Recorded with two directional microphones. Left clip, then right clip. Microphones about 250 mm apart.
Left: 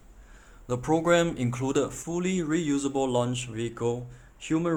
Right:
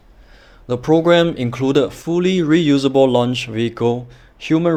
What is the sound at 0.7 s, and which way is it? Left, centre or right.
Speech, right.